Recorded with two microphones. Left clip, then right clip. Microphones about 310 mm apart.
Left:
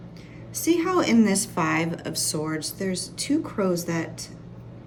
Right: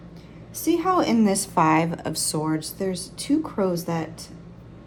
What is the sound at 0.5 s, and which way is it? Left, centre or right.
A woman's voice, centre.